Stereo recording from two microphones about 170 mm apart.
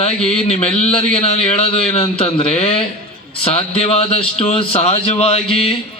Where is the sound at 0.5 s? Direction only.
40° left (ahead or behind).